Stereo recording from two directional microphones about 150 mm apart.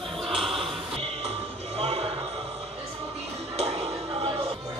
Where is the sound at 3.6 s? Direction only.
45° right (ahead or behind).